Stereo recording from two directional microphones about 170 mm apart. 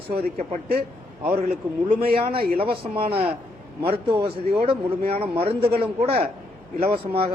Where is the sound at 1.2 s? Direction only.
35° right (ahead or behind).